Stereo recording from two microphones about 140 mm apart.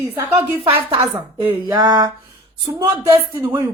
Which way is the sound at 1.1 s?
10° right (ahead or behind).